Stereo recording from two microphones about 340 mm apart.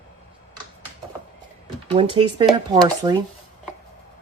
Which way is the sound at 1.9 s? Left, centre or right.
Centre.